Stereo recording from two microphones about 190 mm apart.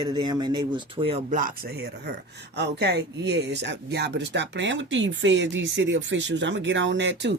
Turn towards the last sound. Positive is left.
turn(degrees=-70)  # may be behind; listen again after turning